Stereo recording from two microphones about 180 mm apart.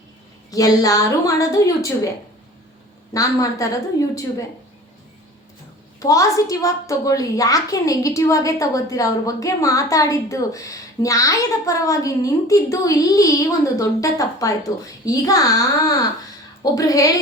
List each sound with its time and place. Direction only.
0.5 s a woman's voice: 20° left (ahead or behind)
3.1 s a woman's voice: 20° left (ahead or behind)
6.0 s a woman's voice: 20° left (ahead or behind)